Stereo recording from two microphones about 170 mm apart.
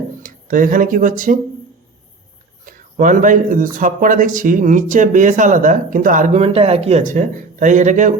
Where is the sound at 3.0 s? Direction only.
50° right (ahead or behind).